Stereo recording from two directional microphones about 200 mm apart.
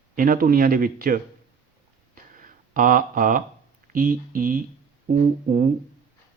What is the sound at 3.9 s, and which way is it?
Speech, 45° right (ahead or behind).